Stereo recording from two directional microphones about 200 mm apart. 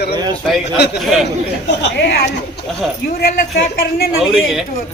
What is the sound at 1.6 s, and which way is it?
Speech, 60° left (ahead or behind).